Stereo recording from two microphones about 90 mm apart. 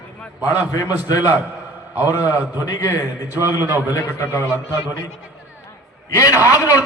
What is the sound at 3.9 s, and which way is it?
Speech, 35° left (ahead or behind).